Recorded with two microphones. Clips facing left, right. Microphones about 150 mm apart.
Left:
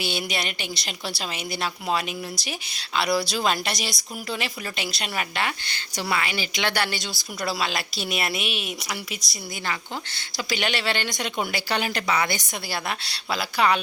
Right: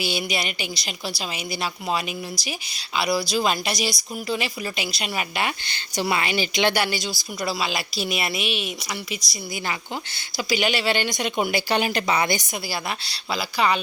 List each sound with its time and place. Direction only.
0.0 s speech: 5° right (ahead or behind)
6.0 s speech: 20° right (ahead or behind)
12.7 s speech: centre (ahead or behind)